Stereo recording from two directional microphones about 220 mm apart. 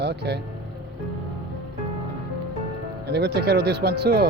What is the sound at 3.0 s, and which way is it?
Speech, 50° right (ahead or behind).